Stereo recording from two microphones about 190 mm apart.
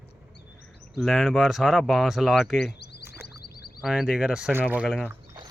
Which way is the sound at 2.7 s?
60° left (ahead or behind).